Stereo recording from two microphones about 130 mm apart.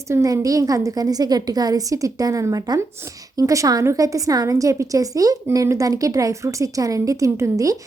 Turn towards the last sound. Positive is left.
turn(degrees=-25)  # may be behind; listen again after turning